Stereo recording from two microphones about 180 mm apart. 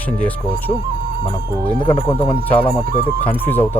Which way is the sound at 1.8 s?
20° left (ahead or behind).